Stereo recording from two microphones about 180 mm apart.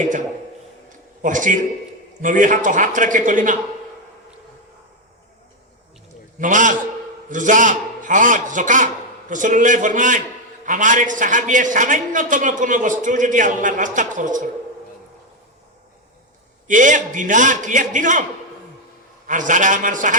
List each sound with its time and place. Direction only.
1.2 s a man's voice: 45° right (ahead or behind)
6.4 s a man's voice: 45° right (ahead or behind)
16.6 s a man's voice: 45° right (ahead or behind)
19.3 s a man's voice: 45° right (ahead or behind)